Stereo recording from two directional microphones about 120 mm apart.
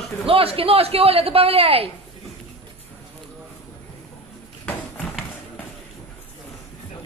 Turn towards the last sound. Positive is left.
turn(degrees=15)  # may be behind; listen again after turning